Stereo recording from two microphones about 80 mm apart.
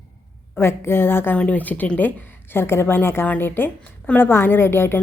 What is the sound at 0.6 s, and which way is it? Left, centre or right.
A woman's voice, left.